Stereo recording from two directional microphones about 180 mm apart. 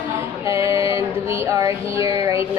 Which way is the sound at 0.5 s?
15° right (ahead or behind).